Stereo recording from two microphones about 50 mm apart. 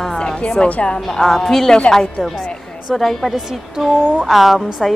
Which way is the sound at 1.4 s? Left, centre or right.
Centre.